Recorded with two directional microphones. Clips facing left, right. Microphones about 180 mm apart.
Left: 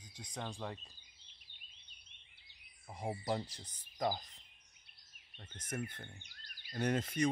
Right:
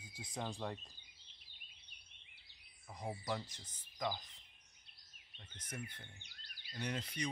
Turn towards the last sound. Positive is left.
turn(degrees=50)  # may be behind; listen again after turning